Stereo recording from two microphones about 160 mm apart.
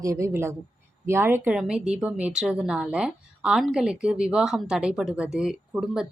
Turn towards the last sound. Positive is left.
turn(degrees=-5)  # may be behind; listen again after turning